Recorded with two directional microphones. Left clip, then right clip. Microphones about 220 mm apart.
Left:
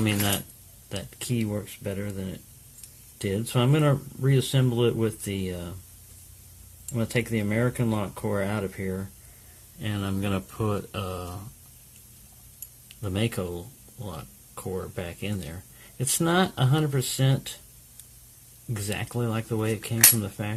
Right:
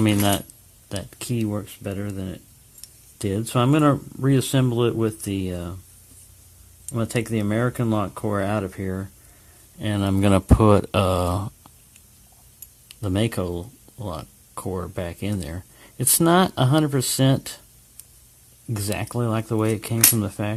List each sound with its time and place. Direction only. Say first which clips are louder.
0.0 s speech: right 6 dB; 45° right (ahead or behind)
6.9 s speech: right 2 dB; 40° right (ahead or behind)
12.9 s speech: right 5 dB; 45° right (ahead or behind)
18.7 s speech: right 4 dB; 40° right (ahead or behind)